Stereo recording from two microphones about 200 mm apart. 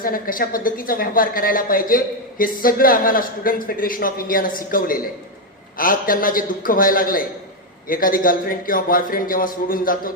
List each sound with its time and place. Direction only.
0.0 s a woman's voice: 45° left (ahead or behind)